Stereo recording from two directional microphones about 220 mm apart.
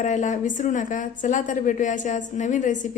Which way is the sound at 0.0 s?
35° left (ahead or behind).